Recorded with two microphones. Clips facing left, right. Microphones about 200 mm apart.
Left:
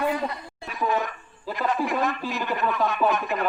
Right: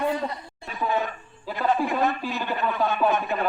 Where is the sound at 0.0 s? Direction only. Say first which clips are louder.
Even; 30° right (ahead or behind).